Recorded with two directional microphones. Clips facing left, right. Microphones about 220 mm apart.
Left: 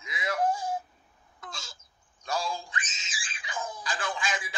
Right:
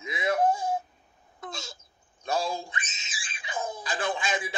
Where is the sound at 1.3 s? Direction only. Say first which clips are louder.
Right 6 dB; 20° right (ahead or behind).